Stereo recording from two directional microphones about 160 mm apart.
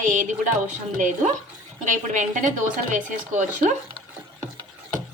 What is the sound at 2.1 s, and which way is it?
A woman's voice, 50° right (ahead or behind).